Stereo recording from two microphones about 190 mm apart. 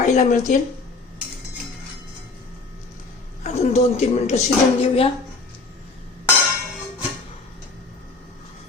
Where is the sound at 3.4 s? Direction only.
35° left (ahead or behind).